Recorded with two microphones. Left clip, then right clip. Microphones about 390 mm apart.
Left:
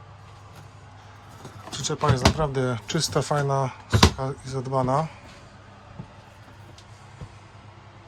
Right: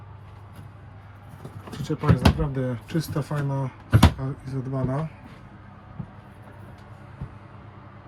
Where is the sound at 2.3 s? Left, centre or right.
Centre.